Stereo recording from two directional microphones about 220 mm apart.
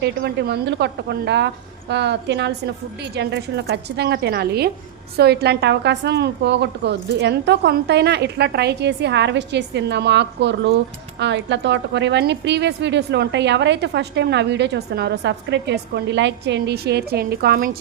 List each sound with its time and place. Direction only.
0.0 s a woman's voice: 50° right (ahead or behind)